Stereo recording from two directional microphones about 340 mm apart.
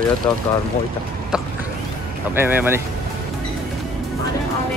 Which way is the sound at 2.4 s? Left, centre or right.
Centre.